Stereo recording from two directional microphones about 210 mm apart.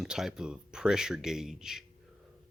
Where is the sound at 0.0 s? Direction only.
Centre (ahead or behind).